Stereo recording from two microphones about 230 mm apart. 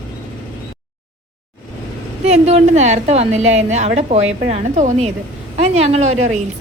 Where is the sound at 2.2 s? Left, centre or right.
Right.